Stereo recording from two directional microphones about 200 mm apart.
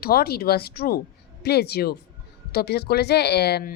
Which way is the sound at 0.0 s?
50° left (ahead or behind).